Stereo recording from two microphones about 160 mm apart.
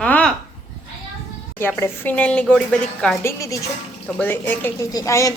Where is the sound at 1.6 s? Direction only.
15° left (ahead or behind).